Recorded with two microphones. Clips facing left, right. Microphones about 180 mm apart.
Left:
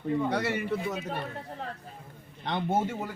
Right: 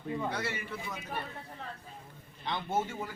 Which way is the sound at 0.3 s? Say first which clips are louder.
Left 7 dB; 65° left (ahead or behind).